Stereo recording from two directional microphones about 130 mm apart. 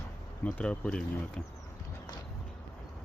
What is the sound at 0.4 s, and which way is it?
Speech, 10° left (ahead or behind).